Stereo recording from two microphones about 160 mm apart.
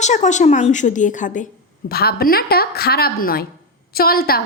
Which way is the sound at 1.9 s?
75° left (ahead or behind).